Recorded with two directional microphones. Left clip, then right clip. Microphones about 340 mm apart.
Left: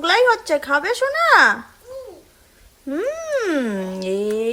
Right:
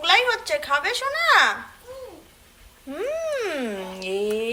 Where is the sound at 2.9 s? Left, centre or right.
Left.